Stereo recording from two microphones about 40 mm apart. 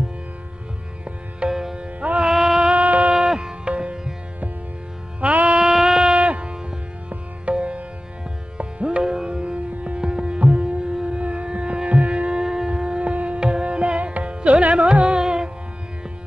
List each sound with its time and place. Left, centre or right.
1.5 s music: centre
1.8 s music: right
2.3 s music: centre
3.3 s music: right
5.2 s music: right
5.5 s a sound: centre
6.2 s music: right
14.9 s music: centre